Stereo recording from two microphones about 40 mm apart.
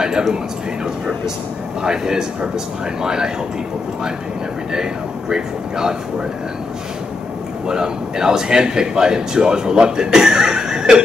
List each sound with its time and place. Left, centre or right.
0.0 s a sound: centre
1.8 s speech: centre
5.3 s speech: centre
7.6 s speech: centre